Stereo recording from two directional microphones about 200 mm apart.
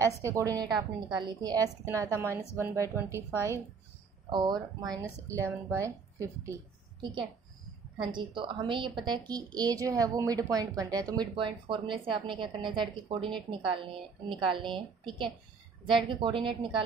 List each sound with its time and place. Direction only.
0.0 s a woman's voice: 15° right (ahead or behind)
16.1 s a woman's voice: 25° right (ahead or behind)